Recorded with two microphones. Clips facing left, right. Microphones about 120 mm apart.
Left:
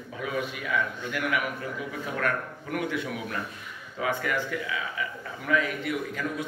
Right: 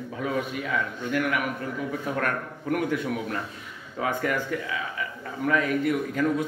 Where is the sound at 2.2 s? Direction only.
45° right (ahead or behind).